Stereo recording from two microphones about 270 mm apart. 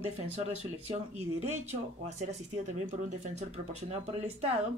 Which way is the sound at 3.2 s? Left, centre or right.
Right.